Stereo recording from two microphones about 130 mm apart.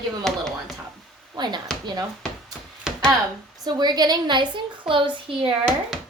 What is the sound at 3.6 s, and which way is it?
A woman's voice, 30° right (ahead or behind).